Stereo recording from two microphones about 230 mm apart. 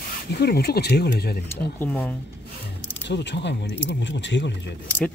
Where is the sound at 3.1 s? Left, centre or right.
Left.